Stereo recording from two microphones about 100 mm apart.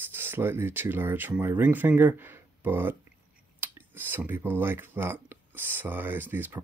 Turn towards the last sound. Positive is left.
turn(degrees=-20)  # may be behind; listen again after turning